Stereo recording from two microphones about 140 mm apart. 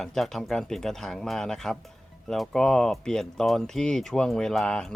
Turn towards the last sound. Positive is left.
turn(degrees=5)  # may be behind; listen again after turning